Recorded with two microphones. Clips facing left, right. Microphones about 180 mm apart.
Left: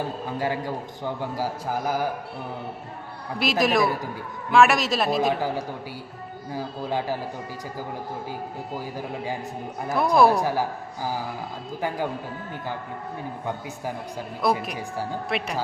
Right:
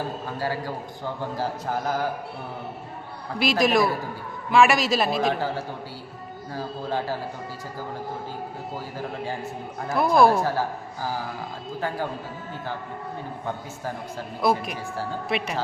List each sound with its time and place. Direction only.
0.3 s a man's voice: 20° left (ahead or behind)
3.3 s a man's voice: centre (ahead or behind)
6.5 s a man's voice: 15° left (ahead or behind)
9.0 s a man's voice: 15° left (ahead or behind)
9.9 s a man's voice: centre (ahead or behind)
10.4 s a man's voice: 15° left (ahead or behind)
14.4 s a man's voice: centre (ahead or behind)